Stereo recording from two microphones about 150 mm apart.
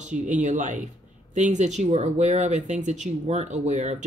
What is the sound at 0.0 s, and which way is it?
Speech, 55° right (ahead or behind).